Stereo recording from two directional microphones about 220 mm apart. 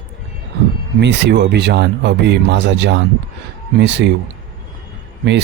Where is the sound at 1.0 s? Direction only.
55° right (ahead or behind).